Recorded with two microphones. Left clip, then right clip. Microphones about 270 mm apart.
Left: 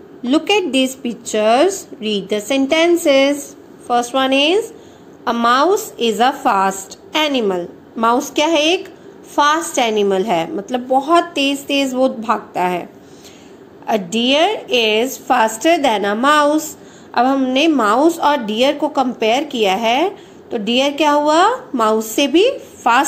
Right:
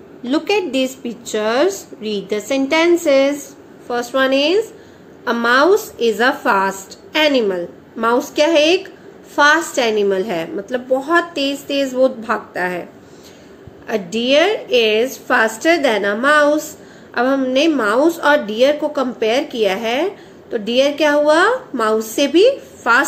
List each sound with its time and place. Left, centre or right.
0.2 s a woman's voice: centre
9.7 s a woman's voice: centre
13.8 s a woman's voice: centre